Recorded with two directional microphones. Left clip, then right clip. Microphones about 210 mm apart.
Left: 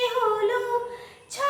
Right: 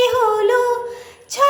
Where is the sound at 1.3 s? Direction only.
30° right (ahead or behind).